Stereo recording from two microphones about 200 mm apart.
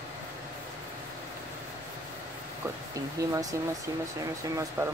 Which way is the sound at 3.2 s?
15° right (ahead or behind).